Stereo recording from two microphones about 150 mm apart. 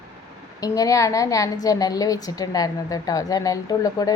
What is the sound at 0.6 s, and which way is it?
Speech, 25° left (ahead or behind).